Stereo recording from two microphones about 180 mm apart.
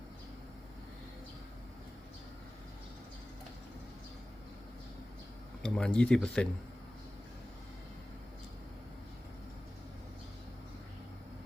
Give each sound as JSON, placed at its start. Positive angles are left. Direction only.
{"t": 5.6, "sound": "speech", "side_deg": 5}